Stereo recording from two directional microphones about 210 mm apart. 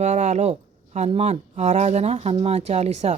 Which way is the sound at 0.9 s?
30° right (ahead or behind).